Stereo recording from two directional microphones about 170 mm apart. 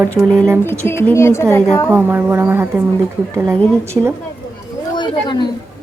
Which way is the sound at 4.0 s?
10° right (ahead or behind).